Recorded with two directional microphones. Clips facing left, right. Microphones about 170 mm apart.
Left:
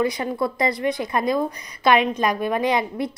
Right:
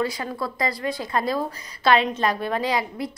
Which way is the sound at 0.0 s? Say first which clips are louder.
Left 4 dB; 20° left (ahead or behind).